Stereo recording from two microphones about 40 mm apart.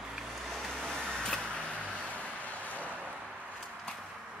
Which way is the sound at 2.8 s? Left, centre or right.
Right.